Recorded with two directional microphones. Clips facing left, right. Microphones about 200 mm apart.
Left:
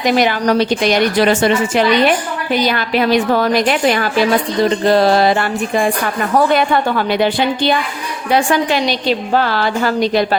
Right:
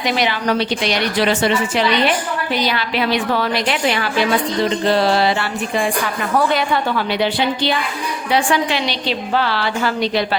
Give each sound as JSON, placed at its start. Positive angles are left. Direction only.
{"t": 0.0, "sound": "a woman's voice", "side_deg": 45}